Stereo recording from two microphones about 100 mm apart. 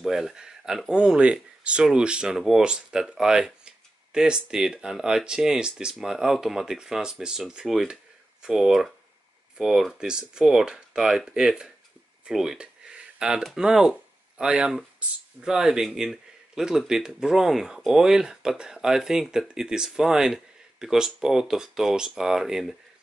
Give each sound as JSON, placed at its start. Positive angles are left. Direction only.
{"t": 0.0, "sound": "speech", "side_deg": -5}